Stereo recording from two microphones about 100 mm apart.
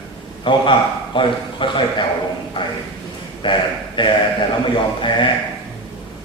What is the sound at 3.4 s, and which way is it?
Speech, 55° left (ahead or behind).